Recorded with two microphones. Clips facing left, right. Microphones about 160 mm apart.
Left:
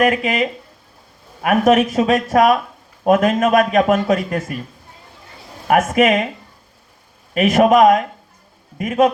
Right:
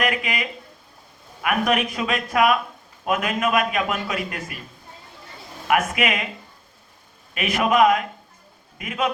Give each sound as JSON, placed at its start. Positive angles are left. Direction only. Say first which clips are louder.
{"t": 0.0, "sound": "a man's voice", "louder": "left 8 dB", "side_deg": 40}
{"t": 5.6, "sound": "a man's voice", "louder": "left 7 dB", "side_deg": 45}
{"t": 7.3, "sound": "a man's voice", "louder": "left 7 dB", "side_deg": 45}